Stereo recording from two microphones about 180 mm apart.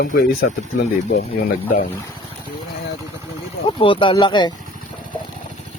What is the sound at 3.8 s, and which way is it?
Speech, 30° left (ahead or behind).